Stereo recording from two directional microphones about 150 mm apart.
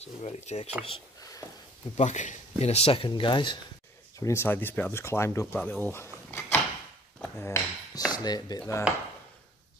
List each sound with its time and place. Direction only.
0.0 s dishes: 45° left (ahead or behind)
2.0 s speech: 55° left (ahead or behind); by 3.5 s 35° left (ahead or behind)
4.2 s speech: 20° left (ahead or behind)
5.6 s drawer open or close: 10° left (ahead or behind)
7.2 s speech: 15° left (ahead or behind)